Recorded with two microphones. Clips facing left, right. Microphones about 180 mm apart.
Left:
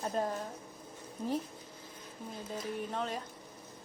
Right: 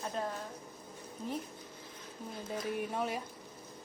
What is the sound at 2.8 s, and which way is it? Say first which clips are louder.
Speech: even; 10° right (ahead or behind).